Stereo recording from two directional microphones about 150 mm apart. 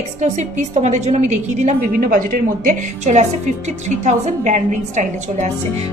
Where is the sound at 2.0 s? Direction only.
65° right (ahead or behind).